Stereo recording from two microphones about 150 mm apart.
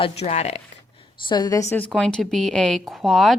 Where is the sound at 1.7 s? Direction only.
5° left (ahead or behind).